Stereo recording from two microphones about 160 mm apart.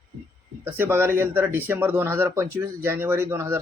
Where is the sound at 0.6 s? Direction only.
15° right (ahead or behind).